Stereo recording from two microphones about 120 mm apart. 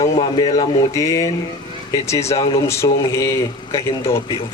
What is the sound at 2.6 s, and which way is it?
Speech, 25° left (ahead or behind).